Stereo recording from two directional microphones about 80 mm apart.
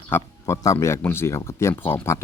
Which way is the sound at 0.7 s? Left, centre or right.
Left.